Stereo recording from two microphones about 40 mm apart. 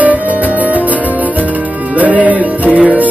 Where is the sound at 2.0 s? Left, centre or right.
Right.